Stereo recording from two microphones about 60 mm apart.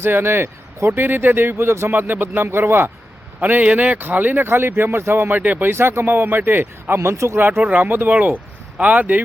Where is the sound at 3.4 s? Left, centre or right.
Right.